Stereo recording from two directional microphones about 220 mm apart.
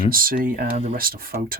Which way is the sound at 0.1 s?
40° right (ahead or behind).